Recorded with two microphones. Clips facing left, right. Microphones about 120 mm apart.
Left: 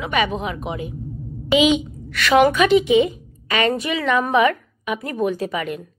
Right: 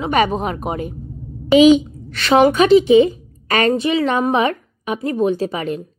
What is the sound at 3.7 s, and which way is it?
A woman's voice, 30° right (ahead or behind).